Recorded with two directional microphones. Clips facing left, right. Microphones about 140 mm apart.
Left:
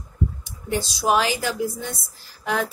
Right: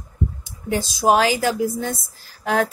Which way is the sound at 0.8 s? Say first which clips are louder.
Right 4 dB; 45° right (ahead or behind).